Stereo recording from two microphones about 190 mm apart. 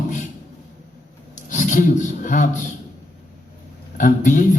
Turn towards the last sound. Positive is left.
turn(degrees=40)  # may be behind; listen again after turning